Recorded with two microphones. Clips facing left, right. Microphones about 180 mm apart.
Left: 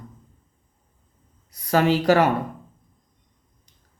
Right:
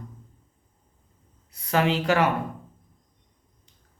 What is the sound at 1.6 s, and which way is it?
Speech, 40° left (ahead or behind).